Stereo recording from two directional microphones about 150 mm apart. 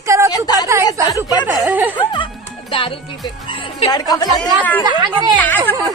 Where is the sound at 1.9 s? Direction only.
30° left (ahead or behind).